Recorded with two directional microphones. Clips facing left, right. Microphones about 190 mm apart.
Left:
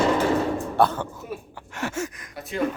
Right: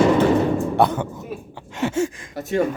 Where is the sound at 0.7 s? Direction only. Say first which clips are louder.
Right 3 dB; 15° right (ahead or behind).